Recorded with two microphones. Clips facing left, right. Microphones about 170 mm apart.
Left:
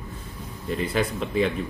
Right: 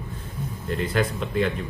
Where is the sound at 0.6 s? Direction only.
Centre (ahead or behind).